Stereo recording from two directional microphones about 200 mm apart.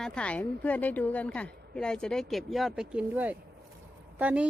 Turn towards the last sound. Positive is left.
turn(degrees=-5)  # may be behind; listen again after turning